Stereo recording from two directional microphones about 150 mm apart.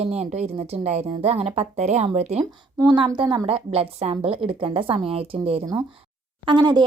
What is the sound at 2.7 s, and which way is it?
A woman's voice, 30° right (ahead or behind).